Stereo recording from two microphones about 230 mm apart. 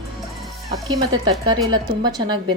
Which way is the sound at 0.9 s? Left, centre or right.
Centre.